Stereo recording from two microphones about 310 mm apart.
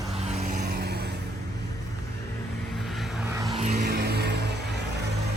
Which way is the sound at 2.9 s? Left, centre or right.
Centre.